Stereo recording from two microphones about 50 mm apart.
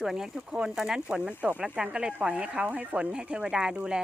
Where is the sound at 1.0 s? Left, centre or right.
Right.